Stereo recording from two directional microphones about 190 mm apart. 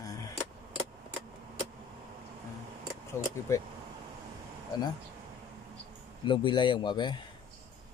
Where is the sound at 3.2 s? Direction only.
15° left (ahead or behind).